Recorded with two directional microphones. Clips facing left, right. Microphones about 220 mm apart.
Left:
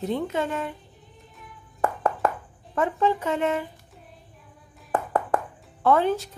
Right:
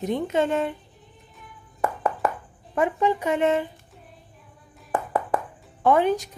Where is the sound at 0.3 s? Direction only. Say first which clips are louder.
Right 5 dB; 25° right (ahead or behind).